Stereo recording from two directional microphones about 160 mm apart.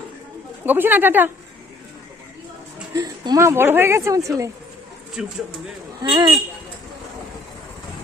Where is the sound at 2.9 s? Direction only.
25° right (ahead or behind).